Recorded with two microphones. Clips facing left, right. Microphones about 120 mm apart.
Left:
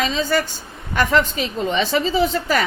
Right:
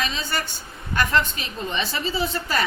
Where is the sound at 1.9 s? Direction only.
90° left.